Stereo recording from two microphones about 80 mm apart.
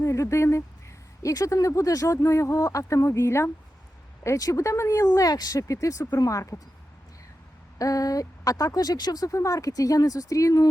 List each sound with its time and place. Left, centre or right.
0.0 s speech: left
7.8 s speech: left